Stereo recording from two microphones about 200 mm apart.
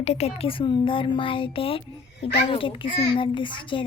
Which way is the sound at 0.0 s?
30° left (ahead or behind).